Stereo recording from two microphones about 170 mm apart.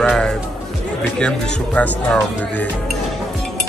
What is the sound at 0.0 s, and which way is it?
Speech, 5° left (ahead or behind).